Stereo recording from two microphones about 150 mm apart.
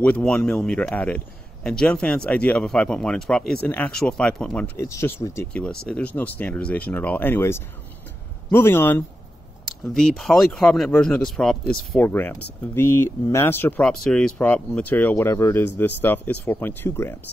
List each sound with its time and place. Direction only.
0.0 s speech: 10° left (ahead or behind)
4.7 s speech: 20° left (ahead or behind)
5.5 s speech: 5° left (ahead or behind)
9.9 s speech: 5° left (ahead or behind)